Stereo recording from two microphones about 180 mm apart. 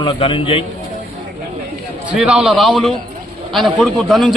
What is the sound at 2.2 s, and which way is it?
A man's voice, 5° right (ahead or behind).